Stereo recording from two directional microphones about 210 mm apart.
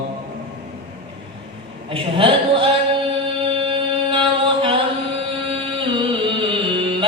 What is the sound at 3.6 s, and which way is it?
Chant, 25° right (ahead or behind).